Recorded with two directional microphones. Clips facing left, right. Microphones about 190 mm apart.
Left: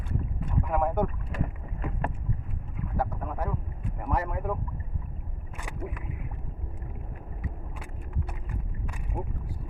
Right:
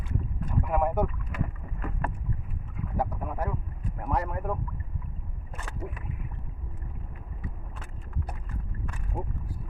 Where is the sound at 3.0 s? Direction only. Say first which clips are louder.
Right 1 dB; 10° right (ahead or behind).